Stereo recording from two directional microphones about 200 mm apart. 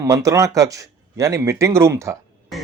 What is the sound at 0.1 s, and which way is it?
Speech, 15° right (ahead or behind).